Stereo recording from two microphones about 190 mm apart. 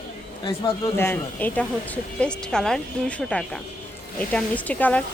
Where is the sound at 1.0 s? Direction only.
10° left (ahead or behind).